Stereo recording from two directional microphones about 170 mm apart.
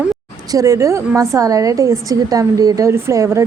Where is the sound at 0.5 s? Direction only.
20° right (ahead or behind).